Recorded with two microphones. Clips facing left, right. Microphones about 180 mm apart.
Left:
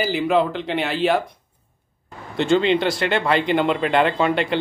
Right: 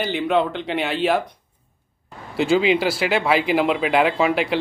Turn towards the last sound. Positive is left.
turn(degrees=-5)  # may be behind; listen again after turning